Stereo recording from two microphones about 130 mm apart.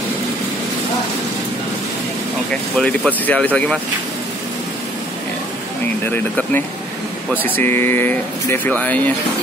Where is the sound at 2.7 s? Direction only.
10° left (ahead or behind).